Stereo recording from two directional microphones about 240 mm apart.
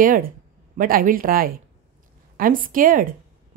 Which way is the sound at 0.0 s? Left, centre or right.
Right.